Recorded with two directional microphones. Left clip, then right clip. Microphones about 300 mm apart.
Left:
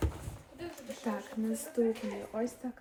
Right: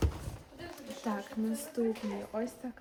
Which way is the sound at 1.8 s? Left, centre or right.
Centre.